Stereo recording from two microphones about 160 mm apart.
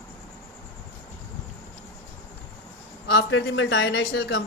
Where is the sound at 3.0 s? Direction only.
90° left.